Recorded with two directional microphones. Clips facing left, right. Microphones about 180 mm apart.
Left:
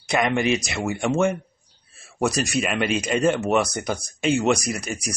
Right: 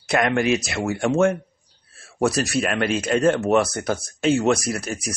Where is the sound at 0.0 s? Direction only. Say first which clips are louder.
Right 1 dB; 5° right (ahead or behind).